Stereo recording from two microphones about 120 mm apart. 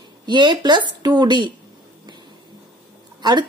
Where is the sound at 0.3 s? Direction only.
40° right (ahead or behind).